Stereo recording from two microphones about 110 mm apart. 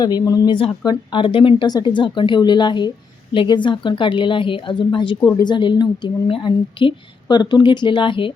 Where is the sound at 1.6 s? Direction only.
40° left (ahead or behind).